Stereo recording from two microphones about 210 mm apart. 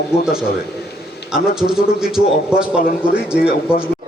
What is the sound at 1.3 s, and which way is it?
A man's voice, 5° right (ahead or behind).